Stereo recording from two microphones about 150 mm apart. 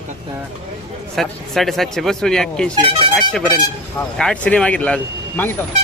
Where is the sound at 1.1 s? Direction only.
Centre (ahead or behind).